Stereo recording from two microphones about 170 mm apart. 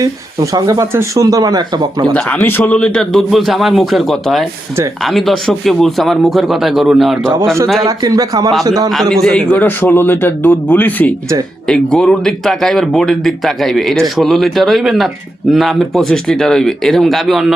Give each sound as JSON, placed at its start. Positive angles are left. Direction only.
{"t": 0.0, "sound": "speech", "side_deg": -20}
{"t": 2.1, "sound": "speech", "side_deg": 10}
{"t": 7.9, "sound": "speech", "side_deg": -20}
{"t": 8.9, "sound": "speech", "side_deg": 0}
{"t": 9.6, "sound": "speech", "side_deg": 10}